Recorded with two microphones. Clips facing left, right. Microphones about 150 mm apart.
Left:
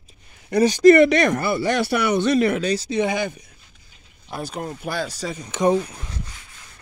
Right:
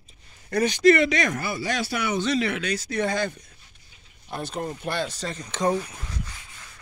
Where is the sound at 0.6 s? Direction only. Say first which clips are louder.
Left 6 dB; 45° left (ahead or behind).